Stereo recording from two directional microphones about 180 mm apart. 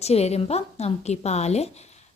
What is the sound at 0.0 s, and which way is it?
Speech, 35° left (ahead or behind).